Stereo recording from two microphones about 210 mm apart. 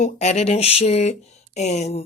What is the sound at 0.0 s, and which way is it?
Speech, 30° left (ahead or behind).